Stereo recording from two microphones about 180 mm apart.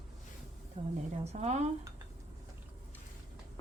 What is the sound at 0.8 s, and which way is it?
Speech, 40° right (ahead or behind).